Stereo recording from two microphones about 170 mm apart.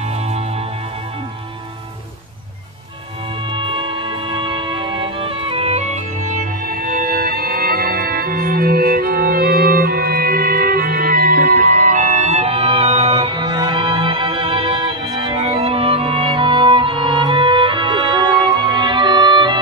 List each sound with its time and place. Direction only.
3.5 s music: 30° right (ahead or behind)